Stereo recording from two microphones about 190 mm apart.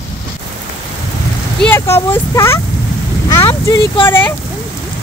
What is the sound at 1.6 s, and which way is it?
Speech, 15° left (ahead or behind).